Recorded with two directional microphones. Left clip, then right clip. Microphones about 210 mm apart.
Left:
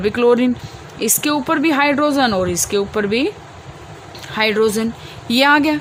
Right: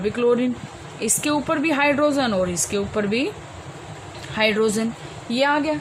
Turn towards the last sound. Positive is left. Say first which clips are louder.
# left 7 dB
turn(degrees=55)  # may be behind; listen again after turning